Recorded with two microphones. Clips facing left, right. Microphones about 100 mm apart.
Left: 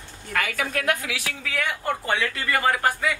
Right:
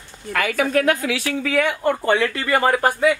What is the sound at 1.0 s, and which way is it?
Speech, 60° right (ahead or behind).